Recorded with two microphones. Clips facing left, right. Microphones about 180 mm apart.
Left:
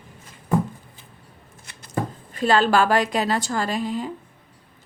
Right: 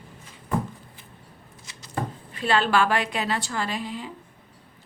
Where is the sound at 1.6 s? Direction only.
60° left (ahead or behind).